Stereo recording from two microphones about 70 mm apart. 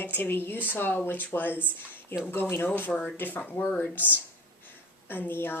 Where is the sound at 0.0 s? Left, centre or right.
Left.